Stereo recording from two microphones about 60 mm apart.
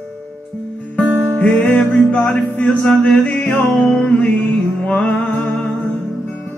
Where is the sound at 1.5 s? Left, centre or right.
Left.